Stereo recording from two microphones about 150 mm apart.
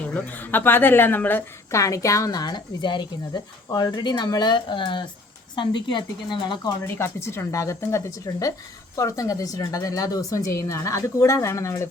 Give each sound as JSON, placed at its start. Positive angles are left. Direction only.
{"t": 0.1, "sound": "a woman's voice", "side_deg": 10}
{"t": 6.8, "sound": "a woman's voice", "side_deg": 15}